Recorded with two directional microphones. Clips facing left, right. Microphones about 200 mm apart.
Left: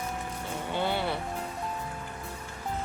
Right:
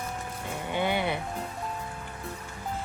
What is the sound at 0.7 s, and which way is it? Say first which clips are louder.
Music: right 2 dB; 15° right (ahead or behind).